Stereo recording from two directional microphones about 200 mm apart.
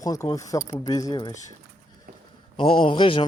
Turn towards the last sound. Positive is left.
turn(degrees=25)  # may be behind; listen again after turning